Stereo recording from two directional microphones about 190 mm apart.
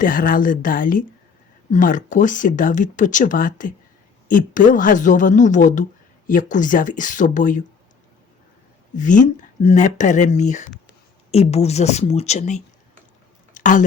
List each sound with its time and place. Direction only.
0.0 s speech: 45° left (ahead or behind)
9.0 s speech: 40° left (ahead or behind)
13.5 s a sound: 40° left (ahead or behind)